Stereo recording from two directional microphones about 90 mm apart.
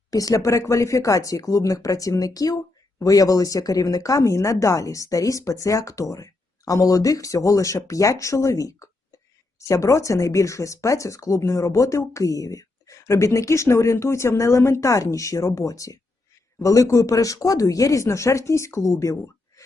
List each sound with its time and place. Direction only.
0.1 s speech: 40° left (ahead or behind)